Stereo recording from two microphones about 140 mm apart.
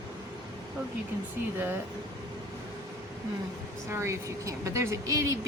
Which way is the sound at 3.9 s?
20° right (ahead or behind).